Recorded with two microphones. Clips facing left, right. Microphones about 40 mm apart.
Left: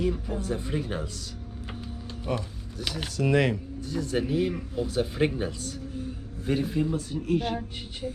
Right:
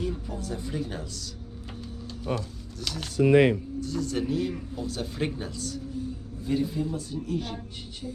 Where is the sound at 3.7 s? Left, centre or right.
Centre.